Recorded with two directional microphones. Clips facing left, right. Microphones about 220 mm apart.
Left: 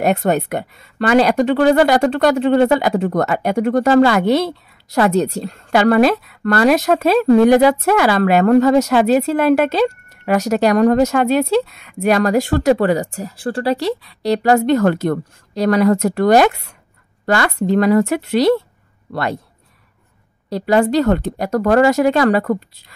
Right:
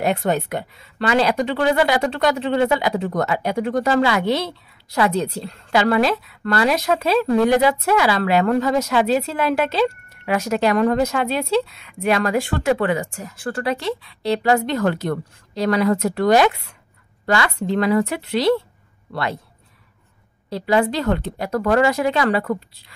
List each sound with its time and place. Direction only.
0.0 s a woman's voice: 50° left (ahead or behind)
20.4 s a woman's voice: 45° left (ahead or behind)